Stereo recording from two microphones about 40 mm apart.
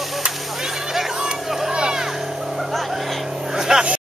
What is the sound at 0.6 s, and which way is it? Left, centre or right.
Whip, centre.